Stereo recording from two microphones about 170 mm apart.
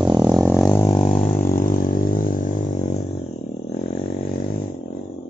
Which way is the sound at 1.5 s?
55° left (ahead or behind).